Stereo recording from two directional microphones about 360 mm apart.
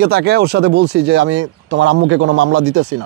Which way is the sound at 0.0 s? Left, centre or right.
Right.